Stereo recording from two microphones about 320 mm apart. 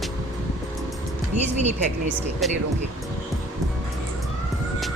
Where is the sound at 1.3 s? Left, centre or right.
Right.